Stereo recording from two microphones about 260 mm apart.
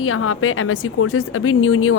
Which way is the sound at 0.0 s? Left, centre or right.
Left.